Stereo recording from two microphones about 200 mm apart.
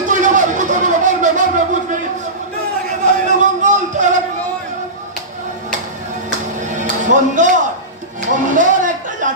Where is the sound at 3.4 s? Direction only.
35° right (ahead or behind).